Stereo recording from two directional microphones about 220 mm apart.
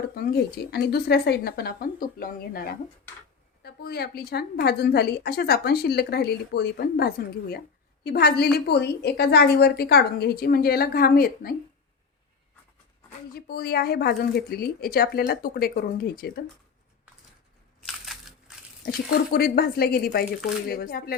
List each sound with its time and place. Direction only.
0.1 s a woman's voice: 45° left (ahead or behind)
13.3 s a woman's voice: 45° left (ahead or behind)
18.0 s crushing: centre (ahead or behind)
18.9 s a woman's voice: 45° left (ahead or behind)